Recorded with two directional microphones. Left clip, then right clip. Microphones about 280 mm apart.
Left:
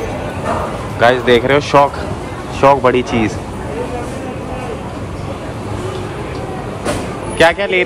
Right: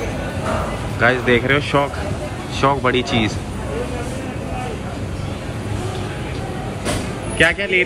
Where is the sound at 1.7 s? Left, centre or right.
Left.